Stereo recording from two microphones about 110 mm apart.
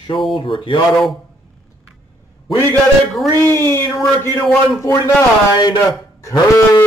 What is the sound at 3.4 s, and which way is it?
Speech, 20° left (ahead or behind).